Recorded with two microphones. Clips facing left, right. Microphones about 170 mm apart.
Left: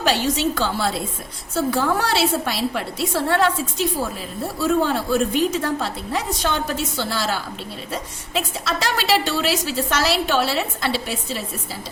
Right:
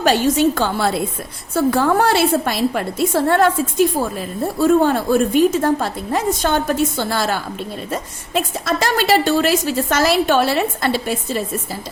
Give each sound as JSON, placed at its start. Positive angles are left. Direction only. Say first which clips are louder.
{"t": 0.0, "sound": "a woman's voice", "louder": "right 6 dB", "side_deg": -50}